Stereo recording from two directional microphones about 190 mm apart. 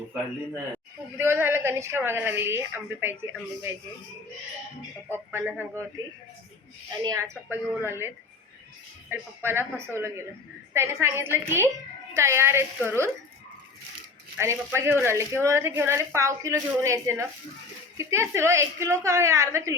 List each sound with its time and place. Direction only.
1.2 s a woman's voice: 10° right (ahead or behind)
5.0 s a woman's voice: 10° right (ahead or behind)
7.0 s a woman's voice: 20° right (ahead or behind)
14.3 s a woman's voice: 15° right (ahead or behind)